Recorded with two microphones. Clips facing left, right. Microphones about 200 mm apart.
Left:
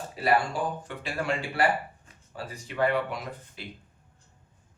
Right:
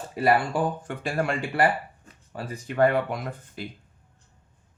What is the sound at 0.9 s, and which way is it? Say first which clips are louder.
A man's voice: right 4 dB; 55° right (ahead or behind).